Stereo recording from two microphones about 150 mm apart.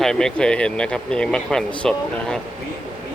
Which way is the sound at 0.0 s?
5° left (ahead or behind).